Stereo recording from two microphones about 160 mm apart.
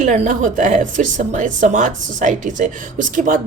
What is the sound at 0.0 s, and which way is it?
A woman's voice, 50° right (ahead or behind).